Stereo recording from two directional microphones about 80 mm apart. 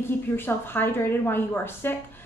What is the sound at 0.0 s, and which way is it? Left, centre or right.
A woman's voice, left.